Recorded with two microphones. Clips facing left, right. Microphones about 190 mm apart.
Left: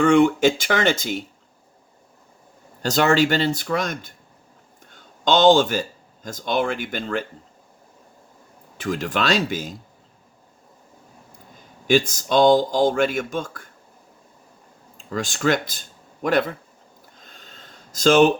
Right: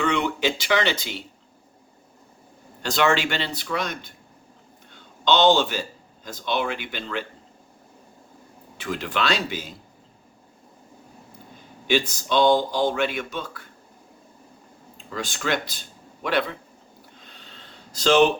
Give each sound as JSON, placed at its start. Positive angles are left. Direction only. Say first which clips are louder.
{"t": 0.0, "sound": "speech", "louder": "left 8 dB", "side_deg": 50}
{"t": 2.8, "sound": "speech", "louder": "left 4 dB", "side_deg": 40}
{"t": 4.9, "sound": "a sound", "louder": "left 1 dB", "side_deg": 45}
{"t": 6.2, "sound": "speech", "louder": "left 3 dB", "side_deg": 45}
{"t": 8.8, "sound": "speech", "louder": "left 3 dB", "side_deg": 45}
{"t": 11.9, "sound": "speech", "louder": "left 4 dB", "side_deg": 45}
{"t": 14.9, "sound": "speech", "louder": "left 4 dB", "side_deg": 45}
{"t": 17.2, "sound": "a sound", "louder": "left 2 dB", "side_deg": 45}